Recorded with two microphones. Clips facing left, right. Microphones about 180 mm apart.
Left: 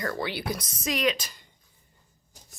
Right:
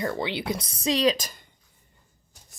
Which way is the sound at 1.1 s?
45° right (ahead or behind).